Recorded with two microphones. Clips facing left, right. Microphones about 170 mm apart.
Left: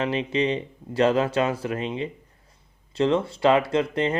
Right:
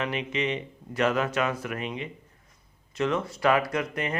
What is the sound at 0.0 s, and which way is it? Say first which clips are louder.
Speech: left 5 dB; 30° left (ahead or behind).